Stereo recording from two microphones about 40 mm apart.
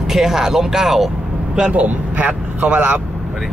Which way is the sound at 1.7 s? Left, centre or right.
Right.